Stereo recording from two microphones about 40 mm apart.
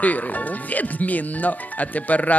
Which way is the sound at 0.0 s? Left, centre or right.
Left.